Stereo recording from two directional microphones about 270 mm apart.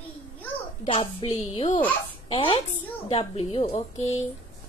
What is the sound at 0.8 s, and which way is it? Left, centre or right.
A woman's voice, left.